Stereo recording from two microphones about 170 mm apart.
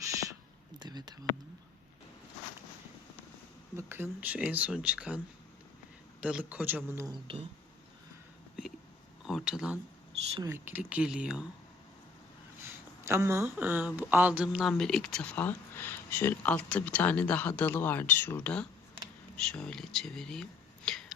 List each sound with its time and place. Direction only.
0.8 s a sound: 25° right (ahead or behind)
3.8 s speech: 15° right (ahead or behind)
6.2 s speech: 5° right (ahead or behind)
9.2 s speech: 5° right (ahead or behind)
13.1 s speech: 15° right (ahead or behind); by 21.0 s 5° left (ahead or behind)